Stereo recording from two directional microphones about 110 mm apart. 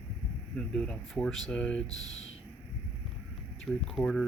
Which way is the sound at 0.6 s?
5° left (ahead or behind).